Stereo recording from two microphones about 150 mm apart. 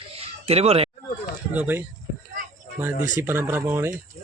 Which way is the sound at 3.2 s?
15° right (ahead or behind).